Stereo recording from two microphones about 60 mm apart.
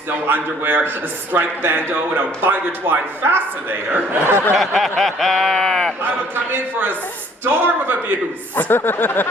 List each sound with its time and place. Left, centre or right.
0.1 s a man's voice: right
4.5 s speech: centre
6.3 s a man's voice: right
8.5 s speech: left